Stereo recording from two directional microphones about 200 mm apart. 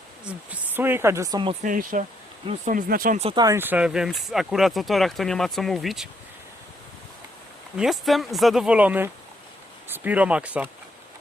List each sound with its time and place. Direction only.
0.3 s speech: 10° right (ahead or behind)
1.6 s speech: 40° right (ahead or behind)
3.2 s speech: 30° right (ahead or behind)
3.4 s speech: 10° right (ahead or behind)
7.8 s speech: centre (ahead or behind)